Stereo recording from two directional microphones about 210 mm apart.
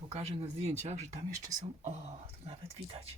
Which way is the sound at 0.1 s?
30° right (ahead or behind).